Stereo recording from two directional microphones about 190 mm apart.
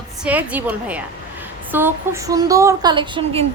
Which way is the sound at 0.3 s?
10° right (ahead or behind).